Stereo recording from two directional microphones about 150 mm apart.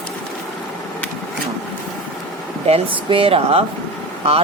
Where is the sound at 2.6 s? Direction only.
40° right (ahead or behind).